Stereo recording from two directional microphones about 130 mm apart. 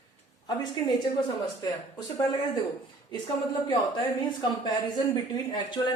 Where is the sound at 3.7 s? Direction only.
35° left (ahead or behind).